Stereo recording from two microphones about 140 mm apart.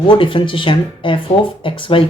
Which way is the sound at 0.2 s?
35° left (ahead or behind).